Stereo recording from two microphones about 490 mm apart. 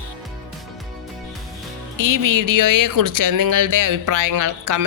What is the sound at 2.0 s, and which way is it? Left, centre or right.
Speech, right.